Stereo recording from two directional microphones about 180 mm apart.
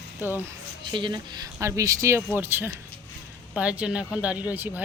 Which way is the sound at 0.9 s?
25° right (ahead or behind).